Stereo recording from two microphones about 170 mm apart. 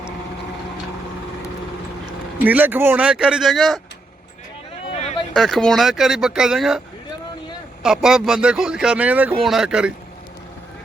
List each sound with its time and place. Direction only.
2.4 s speech: 10° right (ahead or behind)
4.9 s a sound: 40° left (ahead or behind)
5.3 s a man's voice: centre (ahead or behind)